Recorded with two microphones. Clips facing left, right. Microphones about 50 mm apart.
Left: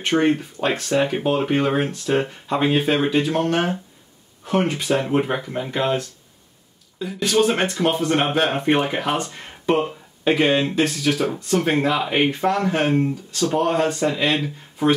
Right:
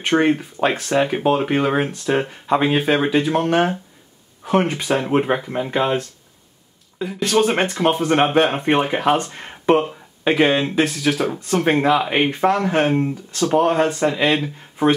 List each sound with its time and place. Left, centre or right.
0.0 s speech: centre
5.8 s speech: centre
7.1 s speech: centre
7.3 s speech: right
9.3 s a sound: centre
10.2 s speech: centre